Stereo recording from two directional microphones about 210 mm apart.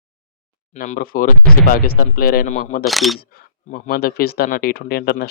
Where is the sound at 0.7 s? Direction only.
40° left (ahead or behind).